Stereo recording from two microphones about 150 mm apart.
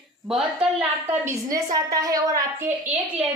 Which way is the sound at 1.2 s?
20° right (ahead or behind).